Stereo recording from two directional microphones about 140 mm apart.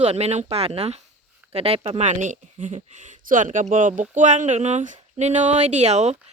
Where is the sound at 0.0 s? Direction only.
50° right (ahead or behind).